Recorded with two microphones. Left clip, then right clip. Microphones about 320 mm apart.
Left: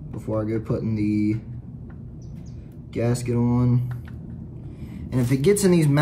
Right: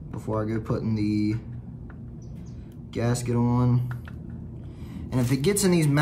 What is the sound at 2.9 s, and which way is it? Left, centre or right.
Speech, centre.